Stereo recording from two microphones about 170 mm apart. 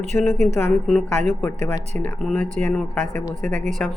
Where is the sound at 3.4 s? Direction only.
50° right (ahead or behind).